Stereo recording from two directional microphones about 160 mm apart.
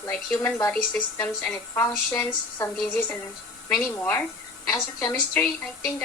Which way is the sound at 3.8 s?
10° left (ahead or behind).